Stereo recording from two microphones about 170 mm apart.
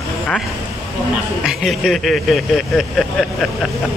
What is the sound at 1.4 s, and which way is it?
Speech, centre (ahead or behind).